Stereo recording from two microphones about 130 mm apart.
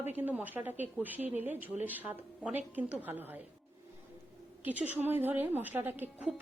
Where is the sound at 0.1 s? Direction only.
15° right (ahead or behind).